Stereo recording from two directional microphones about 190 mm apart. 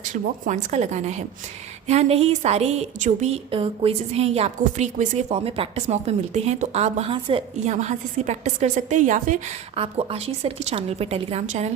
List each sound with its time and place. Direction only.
0.1 s speech: 40° right (ahead or behind)
7.7 s speech: 35° right (ahead or behind)